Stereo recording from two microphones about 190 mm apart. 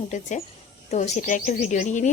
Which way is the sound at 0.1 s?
40° left (ahead or behind).